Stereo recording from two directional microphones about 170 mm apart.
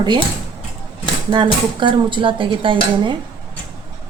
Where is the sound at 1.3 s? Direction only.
30° right (ahead or behind).